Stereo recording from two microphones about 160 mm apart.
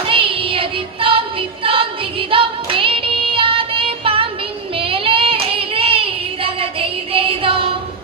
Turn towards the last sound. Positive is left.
turn(degrees=-35)  # may be behind; listen again after turning